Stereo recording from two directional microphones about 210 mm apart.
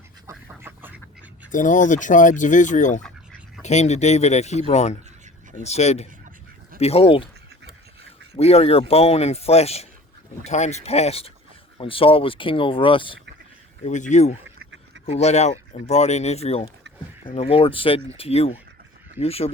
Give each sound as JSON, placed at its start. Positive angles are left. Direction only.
{"t": 0.3, "sound": "duck", "side_deg": -10}
{"t": 1.5, "sound": "a man's voice", "side_deg": 40}
{"t": 8.4, "sound": "a man's voice", "side_deg": 30}
{"t": 13.8, "sound": "a man's voice", "side_deg": 35}